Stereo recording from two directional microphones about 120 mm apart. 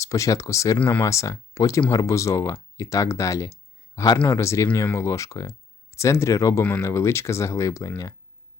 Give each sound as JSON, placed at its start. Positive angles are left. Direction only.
{"t": 0.0, "sound": "speech", "side_deg": 25}